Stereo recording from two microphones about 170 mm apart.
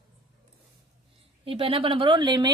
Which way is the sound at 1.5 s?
35° right (ahead or behind).